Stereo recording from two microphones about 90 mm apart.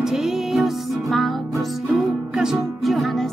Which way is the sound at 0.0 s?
5° right (ahead or behind).